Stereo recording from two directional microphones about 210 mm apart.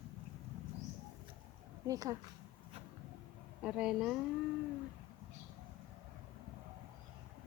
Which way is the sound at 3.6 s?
5° right (ahead or behind).